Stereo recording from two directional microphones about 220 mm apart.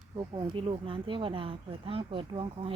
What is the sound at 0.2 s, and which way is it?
Speech, 20° right (ahead or behind).